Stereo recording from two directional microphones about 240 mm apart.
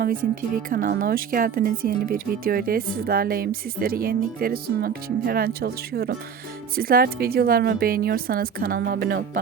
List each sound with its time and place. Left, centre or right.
0.0 s speech: right